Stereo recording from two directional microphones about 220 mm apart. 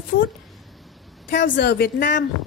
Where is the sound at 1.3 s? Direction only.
50° left (ahead or behind).